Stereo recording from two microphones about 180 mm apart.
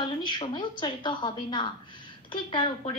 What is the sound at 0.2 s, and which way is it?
A woman's voice, 25° left (ahead or behind).